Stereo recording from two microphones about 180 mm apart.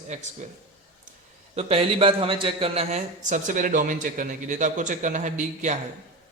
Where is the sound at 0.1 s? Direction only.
40° right (ahead or behind).